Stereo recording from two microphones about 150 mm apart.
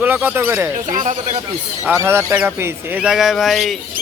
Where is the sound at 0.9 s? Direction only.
55° right (ahead or behind).